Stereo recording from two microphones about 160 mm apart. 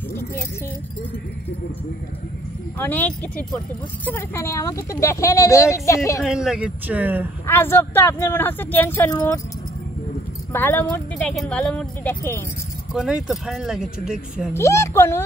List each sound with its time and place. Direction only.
2.8 s speech: 10° left (ahead or behind)
6.2 s speech: 5° right (ahead or behind)
7.4 s speech: 15° left (ahead or behind)
10.5 s speech: 10° left (ahead or behind)
12.9 s speech: centre (ahead or behind)
14.5 s speech: 15° left (ahead or behind)